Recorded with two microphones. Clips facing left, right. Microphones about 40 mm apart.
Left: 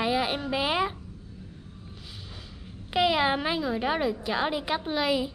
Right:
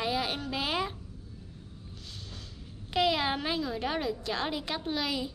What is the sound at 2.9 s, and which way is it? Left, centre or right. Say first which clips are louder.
Speech: left 4 dB; centre.